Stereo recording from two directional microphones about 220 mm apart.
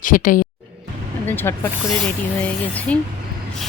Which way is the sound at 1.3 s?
10° left (ahead or behind).